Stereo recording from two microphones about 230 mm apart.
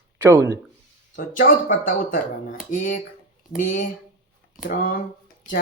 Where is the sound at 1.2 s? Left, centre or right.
Left.